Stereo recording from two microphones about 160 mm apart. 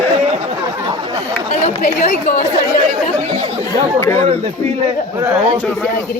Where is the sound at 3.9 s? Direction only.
15° left (ahead or behind).